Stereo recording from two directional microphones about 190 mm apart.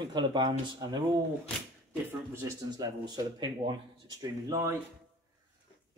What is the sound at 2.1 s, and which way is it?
Speech, 20° right (ahead or behind).